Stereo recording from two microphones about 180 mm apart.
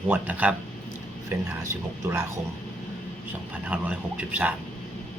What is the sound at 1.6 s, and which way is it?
Speech, 15° right (ahead or behind).